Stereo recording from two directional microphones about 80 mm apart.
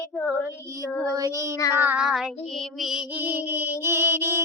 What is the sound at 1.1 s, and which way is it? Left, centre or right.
Child singing, right.